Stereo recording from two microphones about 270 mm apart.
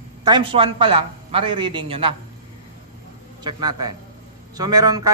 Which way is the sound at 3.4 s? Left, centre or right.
Centre.